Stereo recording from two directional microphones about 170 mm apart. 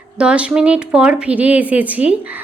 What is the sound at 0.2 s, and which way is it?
Speech, 5° right (ahead or behind).